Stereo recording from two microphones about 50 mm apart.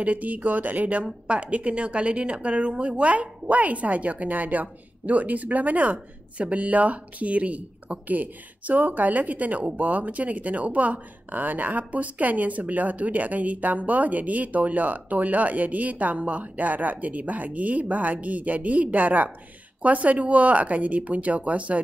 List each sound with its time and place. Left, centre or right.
0.0 s a woman's voice: right